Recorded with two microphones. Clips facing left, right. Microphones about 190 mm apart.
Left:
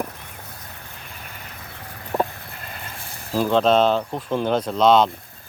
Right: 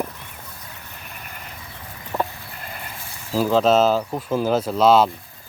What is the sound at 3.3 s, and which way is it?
Speech, 5° right (ahead or behind).